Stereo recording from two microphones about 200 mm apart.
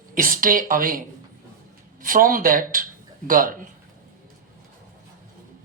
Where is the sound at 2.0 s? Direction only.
45° right (ahead or behind).